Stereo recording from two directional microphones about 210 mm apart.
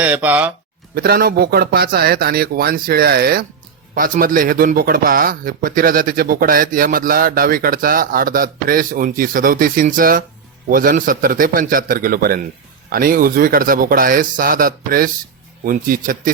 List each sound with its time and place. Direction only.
0.0 s speech: 5° right (ahead or behind)
0.9 s a man's voice: 45° right (ahead or behind)